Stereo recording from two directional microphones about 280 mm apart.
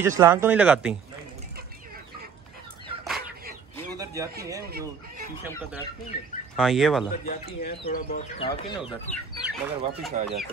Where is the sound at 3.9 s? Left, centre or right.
Centre.